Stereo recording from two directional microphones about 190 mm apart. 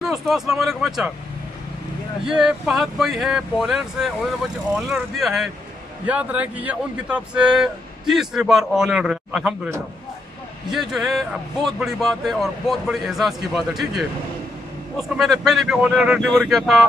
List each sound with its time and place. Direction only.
0.0 s speech: centre (ahead or behind)
2.2 s speech: 5° right (ahead or behind)
10.7 s speech: centre (ahead or behind)